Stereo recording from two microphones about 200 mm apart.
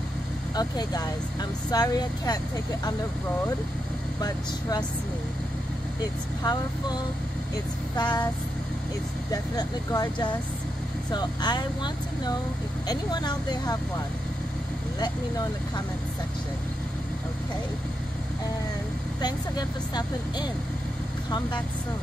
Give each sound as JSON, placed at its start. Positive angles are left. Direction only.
{"t": 0.6, "sound": "speech", "side_deg": 20}
{"t": 4.2, "sound": "speech", "side_deg": 20}
{"t": 6.4, "sound": "speech", "side_deg": 20}
{"t": 9.3, "sound": "speech", "side_deg": 20}
{"t": 15.0, "sound": "speech", "side_deg": 20}
{"t": 19.2, "sound": "speech", "side_deg": 20}